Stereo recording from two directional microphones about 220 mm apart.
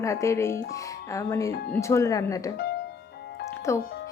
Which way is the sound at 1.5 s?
45° left (ahead or behind).